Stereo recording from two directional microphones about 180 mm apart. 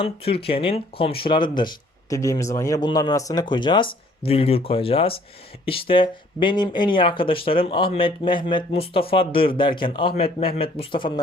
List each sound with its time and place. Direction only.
0.0 s speech: 30° left (ahead or behind)